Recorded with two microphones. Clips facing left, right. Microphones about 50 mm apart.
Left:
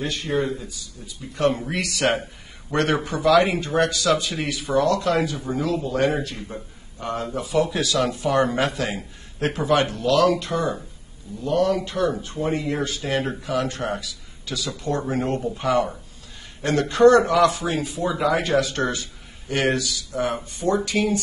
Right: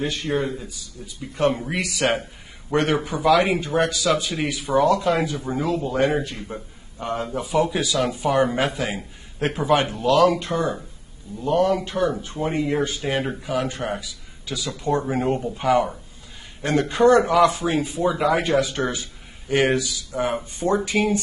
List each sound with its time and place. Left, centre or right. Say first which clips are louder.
0.0 s a man's voice: right 2 dB; right
0.3 s speech: left 2 dB; centre
1.0 s a man's voice: even; centre
18.3 s a man's voice: right 1 dB; centre